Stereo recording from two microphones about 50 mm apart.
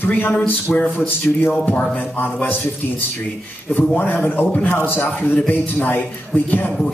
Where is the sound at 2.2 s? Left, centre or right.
Left.